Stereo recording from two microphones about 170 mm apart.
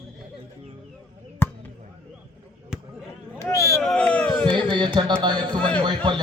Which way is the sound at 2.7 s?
5° right (ahead or behind).